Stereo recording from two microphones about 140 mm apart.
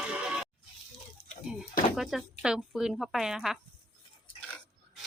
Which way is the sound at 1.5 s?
5° right (ahead or behind).